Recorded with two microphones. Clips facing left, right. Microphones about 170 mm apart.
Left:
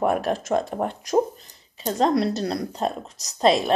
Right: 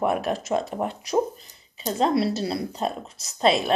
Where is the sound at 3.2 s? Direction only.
40° left (ahead or behind).